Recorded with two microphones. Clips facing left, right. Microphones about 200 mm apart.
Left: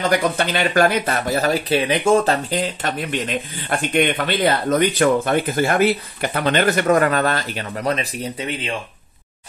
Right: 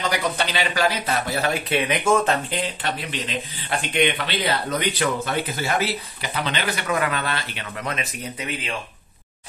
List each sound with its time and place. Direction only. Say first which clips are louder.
0.1 s speech: left 5 dB; 50° left (ahead or behind); by 8.7 s 30° left (ahead or behind)